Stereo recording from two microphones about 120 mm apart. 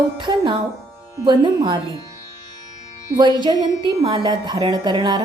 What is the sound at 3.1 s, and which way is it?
Speech, 40° right (ahead or behind).